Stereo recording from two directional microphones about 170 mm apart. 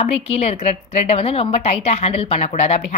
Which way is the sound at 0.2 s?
35° left (ahead or behind).